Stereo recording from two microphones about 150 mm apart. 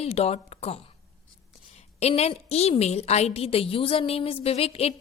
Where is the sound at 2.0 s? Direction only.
45° left (ahead or behind).